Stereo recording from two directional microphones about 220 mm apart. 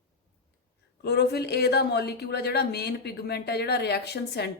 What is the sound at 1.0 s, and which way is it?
Speech, 45° left (ahead or behind).